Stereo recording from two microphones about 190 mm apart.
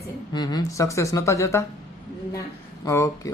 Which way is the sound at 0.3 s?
20° left (ahead or behind).